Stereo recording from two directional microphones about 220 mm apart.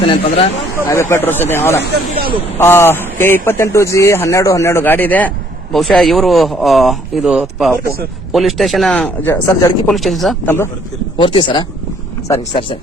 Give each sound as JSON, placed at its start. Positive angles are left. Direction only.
{"t": 0.1, "sound": "speech", "side_deg": 25}
{"t": 0.9, "sound": "speech", "side_deg": 10}
{"t": 9.9, "sound": "speech", "side_deg": 0}
{"t": 11.2, "sound": "speech", "side_deg": 20}